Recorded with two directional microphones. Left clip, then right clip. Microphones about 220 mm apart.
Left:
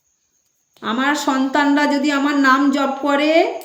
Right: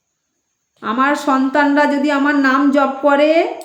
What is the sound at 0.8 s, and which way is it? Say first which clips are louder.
A woman's voice: right 3 dB; 10° left (ahead or behind).